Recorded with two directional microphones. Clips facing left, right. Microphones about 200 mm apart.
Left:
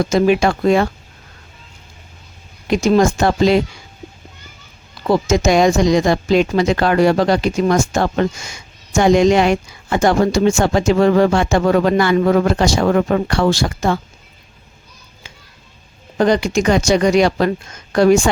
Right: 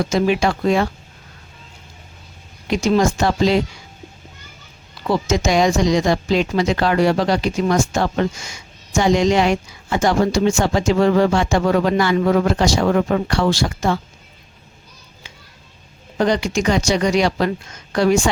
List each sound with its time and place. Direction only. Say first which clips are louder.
0.0 s a woman's voice: left 3 dB; 50° left (ahead or behind)
2.6 s a woman's voice: left 3 dB; 50° left (ahead or behind)
5.0 s a woman's voice: left 4 dB; 45° left (ahead or behind)
16.1 s a woman's voice: left 3 dB; 50° left (ahead or behind)